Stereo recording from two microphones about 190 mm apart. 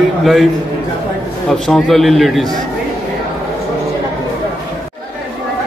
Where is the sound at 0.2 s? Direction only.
Centre (ahead or behind).